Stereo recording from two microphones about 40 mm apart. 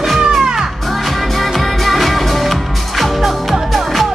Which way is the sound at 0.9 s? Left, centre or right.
Centre.